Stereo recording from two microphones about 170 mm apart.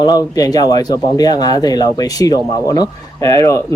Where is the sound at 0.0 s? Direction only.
20° left (ahead or behind).